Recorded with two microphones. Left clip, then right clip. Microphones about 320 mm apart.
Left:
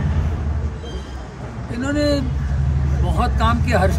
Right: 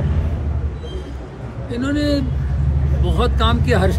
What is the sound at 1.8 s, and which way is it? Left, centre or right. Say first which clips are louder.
Speech: left 1 dB; centre.